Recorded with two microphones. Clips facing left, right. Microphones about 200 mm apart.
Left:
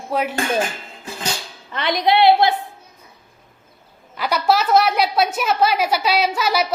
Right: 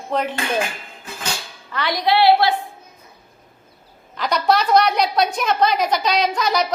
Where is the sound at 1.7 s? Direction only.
20° left (ahead or behind).